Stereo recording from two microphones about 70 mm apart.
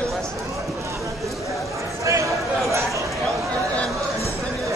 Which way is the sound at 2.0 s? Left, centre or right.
Right.